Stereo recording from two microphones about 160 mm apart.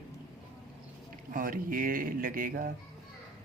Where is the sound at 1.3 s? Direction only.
60° right (ahead or behind).